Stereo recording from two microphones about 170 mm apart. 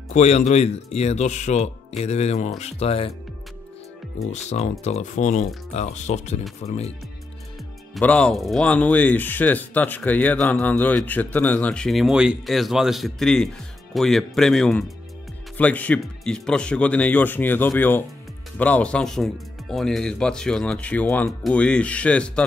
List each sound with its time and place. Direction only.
0.1 s speech: 40° left (ahead or behind)
4.3 s speech: 40° left (ahead or behind)
7.9 s speech: 5° left (ahead or behind)